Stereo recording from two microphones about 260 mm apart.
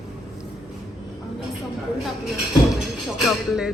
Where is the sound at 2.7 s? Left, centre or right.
Centre.